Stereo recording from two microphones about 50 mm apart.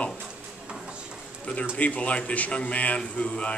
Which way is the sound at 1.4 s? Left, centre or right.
Left.